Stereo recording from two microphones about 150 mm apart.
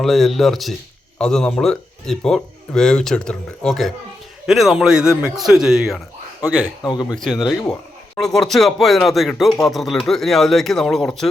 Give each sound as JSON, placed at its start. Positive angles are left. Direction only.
{"t": 0.0, "sound": "a man's voice", "side_deg": 0}
{"t": 6.9, "sound": "speech", "side_deg": 30}
{"t": 7.3, "sound": "a man's voice", "side_deg": 0}